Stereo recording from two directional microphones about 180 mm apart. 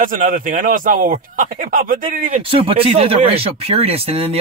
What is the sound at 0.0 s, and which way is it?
Speech, 50° right (ahead or behind).